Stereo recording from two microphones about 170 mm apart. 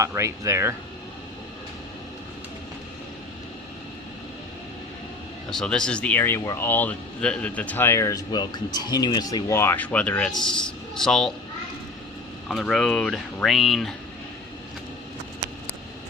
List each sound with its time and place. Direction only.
0.0 s speech: 15° right (ahead or behind)
5.5 s speech: 5° left (ahead or behind)
12.5 s speech: centre (ahead or behind)